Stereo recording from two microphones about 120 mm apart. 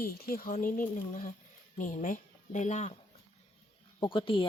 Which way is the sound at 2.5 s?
85° left.